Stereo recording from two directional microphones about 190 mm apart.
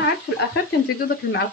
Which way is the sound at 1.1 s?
60° left (ahead or behind).